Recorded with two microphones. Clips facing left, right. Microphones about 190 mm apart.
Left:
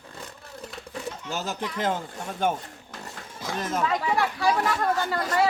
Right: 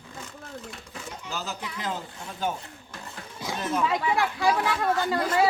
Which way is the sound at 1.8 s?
50° left (ahead or behind).